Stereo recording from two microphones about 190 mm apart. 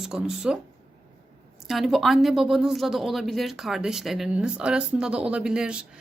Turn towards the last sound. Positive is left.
turn(degrees=-5)  # may be behind; listen again after turning